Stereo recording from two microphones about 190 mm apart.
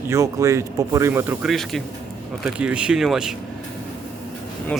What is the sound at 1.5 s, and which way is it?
A man's voice, centre (ahead or behind).